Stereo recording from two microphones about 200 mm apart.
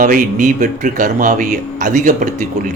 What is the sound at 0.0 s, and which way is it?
A man's voice, 40° right (ahead or behind).